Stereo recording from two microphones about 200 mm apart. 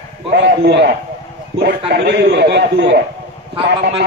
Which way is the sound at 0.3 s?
55° right (ahead or behind).